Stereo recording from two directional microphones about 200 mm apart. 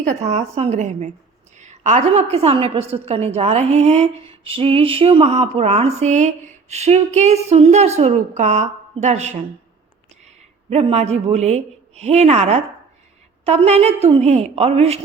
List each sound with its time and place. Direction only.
0.1 s a woman's voice: 35° right (ahead or behind)